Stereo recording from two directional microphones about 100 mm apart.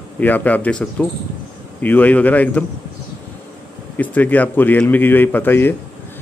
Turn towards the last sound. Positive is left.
turn(degrees=20)  # may be behind; listen again after turning